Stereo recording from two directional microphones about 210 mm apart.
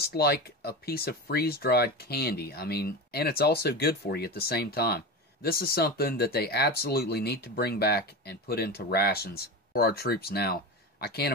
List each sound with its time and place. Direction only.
0.0 s speech: 50° left (ahead or behind)